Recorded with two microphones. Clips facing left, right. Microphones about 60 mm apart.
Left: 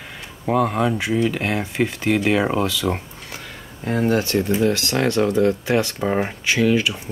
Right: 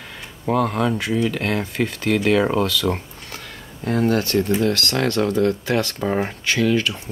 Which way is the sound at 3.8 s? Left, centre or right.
Centre.